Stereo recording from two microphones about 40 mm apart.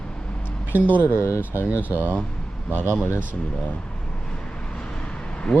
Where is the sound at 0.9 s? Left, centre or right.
Left.